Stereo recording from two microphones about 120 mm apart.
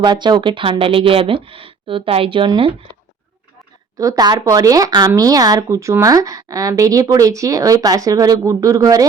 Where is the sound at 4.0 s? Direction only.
30° right (ahead or behind).